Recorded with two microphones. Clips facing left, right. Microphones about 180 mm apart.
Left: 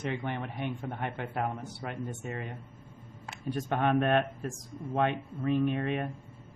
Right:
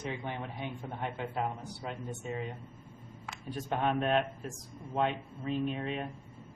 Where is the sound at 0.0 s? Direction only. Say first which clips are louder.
Left 4 dB; 60° left (ahead or behind).